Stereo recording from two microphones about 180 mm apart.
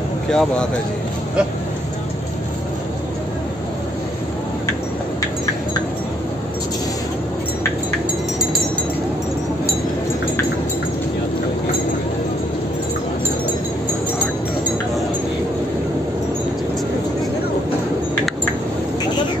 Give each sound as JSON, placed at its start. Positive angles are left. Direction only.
{"t": 0.3, "sound": "speech", "side_deg": 5}